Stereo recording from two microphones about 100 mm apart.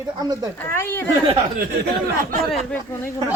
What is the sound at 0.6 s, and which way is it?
Speech, 25° left (ahead or behind).